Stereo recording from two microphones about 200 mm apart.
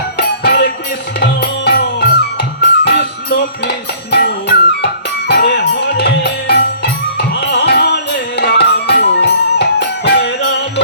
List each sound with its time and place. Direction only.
0.2 s music: 55° left (ahead or behind)